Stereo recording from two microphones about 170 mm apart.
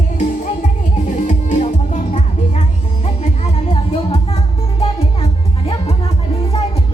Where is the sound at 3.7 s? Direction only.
40° left (ahead or behind).